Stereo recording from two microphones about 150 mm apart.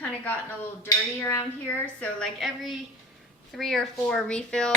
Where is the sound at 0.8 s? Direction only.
15° left (ahead or behind).